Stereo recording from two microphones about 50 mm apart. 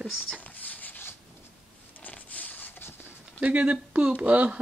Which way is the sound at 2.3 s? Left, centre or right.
Left.